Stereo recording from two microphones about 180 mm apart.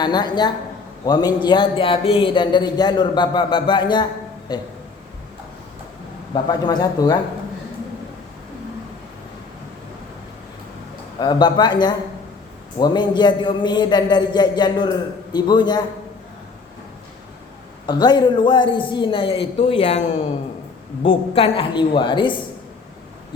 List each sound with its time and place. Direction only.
0.0 s a man's voice: 25° left (ahead or behind)
6.3 s a man's voice: 20° left (ahead or behind)
11.2 s a man's voice: 25° left (ahead or behind)
17.8 s a man's voice: 25° left (ahead or behind)
21.0 s a man's voice: 30° left (ahead or behind)